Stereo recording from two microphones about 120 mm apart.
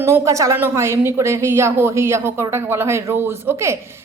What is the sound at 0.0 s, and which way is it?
A woman's voice, 25° right (ahead or behind).